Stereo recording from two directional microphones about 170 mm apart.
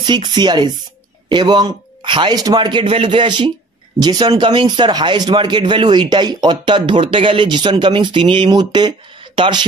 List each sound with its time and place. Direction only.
0.0 s speech: 25° right (ahead or behind)